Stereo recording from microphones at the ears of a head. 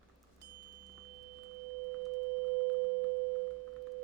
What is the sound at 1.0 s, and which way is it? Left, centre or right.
Tuning fork, right.